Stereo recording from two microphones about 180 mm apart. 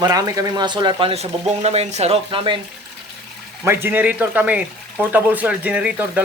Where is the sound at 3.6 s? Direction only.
10° right (ahead or behind).